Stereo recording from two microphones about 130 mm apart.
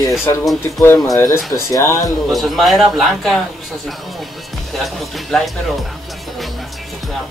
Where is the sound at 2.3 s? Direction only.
Centre (ahead or behind).